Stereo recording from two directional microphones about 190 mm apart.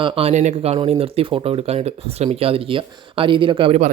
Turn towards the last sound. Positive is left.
turn(degrees=-35)  # may be behind; listen again after turning